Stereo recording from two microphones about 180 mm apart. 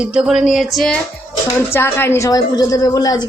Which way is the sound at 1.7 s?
15° left (ahead or behind).